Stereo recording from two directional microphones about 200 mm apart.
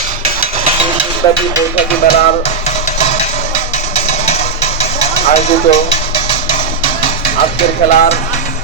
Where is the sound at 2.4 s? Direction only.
35° left (ahead or behind).